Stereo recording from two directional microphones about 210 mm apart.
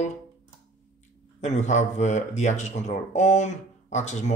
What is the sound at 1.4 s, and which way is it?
A man's voice, 35° left (ahead or behind).